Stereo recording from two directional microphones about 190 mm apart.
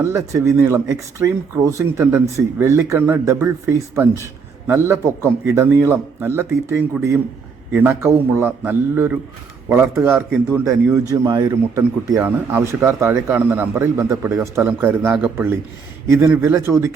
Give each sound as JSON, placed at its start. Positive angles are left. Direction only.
{"t": 0.0, "sound": "a man's voice", "side_deg": -15}
{"t": 4.6, "sound": "a man's voice", "side_deg": -15}